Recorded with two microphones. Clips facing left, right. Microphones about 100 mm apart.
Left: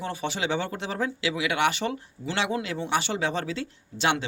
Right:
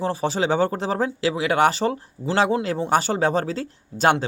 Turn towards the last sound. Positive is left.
turn(degrees=-40)  # may be behind; listen again after turning